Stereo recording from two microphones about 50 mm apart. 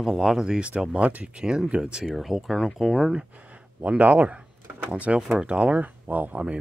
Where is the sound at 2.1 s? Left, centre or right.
Centre.